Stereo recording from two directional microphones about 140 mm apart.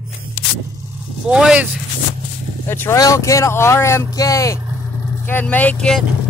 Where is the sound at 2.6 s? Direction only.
20° left (ahead or behind).